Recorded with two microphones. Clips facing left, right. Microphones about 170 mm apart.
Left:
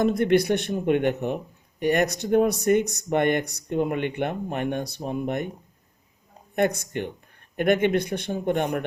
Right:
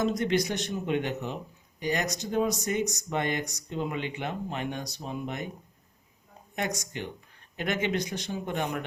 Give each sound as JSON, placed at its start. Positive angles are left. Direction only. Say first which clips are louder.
{"t": 0.0, "sound": "speech", "louder": "left 6 dB", "side_deg": 60}
{"t": 6.6, "sound": "speech", "louder": "left 9 dB", "side_deg": 55}